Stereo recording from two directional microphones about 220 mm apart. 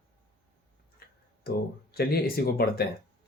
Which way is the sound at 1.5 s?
45° left (ahead or behind).